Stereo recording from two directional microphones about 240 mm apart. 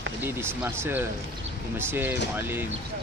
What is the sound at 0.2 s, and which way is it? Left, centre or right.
Speech, centre.